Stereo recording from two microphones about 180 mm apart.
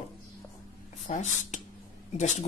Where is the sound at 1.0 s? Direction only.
45° left (ahead or behind).